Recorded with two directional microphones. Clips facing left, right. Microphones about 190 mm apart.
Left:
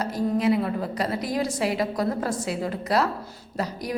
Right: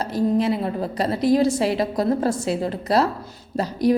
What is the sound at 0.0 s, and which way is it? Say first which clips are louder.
A woman's voice: right 3 dB; 30° right (ahead or behind).